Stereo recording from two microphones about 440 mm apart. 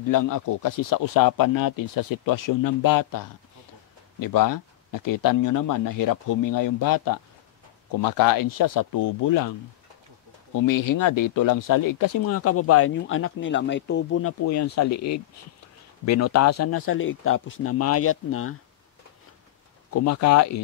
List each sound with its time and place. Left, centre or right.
0.1 s speech: left
10.5 s speech: left
12.3 s speech: left
19.9 s speech: left